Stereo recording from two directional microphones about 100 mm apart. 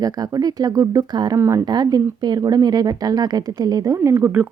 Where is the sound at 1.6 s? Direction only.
45° right (ahead or behind).